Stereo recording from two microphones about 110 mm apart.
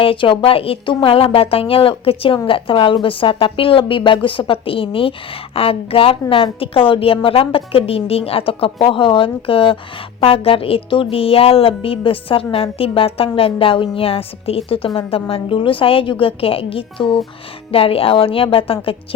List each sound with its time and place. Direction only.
0.0 s speech: 55° left (ahead or behind)